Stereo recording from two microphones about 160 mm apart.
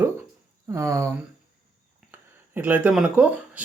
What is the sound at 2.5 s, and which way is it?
Speech, 10° right (ahead or behind).